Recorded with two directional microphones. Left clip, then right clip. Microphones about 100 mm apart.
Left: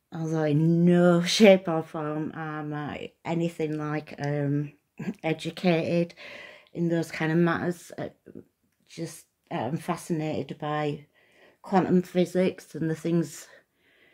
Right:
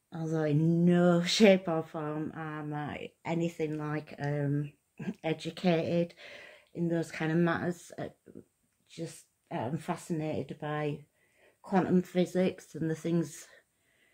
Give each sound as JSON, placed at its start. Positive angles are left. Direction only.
{"t": 0.1, "sound": "speech", "side_deg": 30}
{"t": 8.9, "sound": "speech", "side_deg": 35}